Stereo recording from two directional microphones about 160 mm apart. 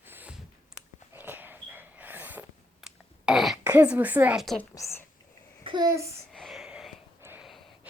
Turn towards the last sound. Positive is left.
turn(degrees=-15)  # may be behind; listen again after turning